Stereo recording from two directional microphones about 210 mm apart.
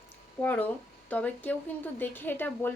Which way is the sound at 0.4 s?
10° left (ahead or behind).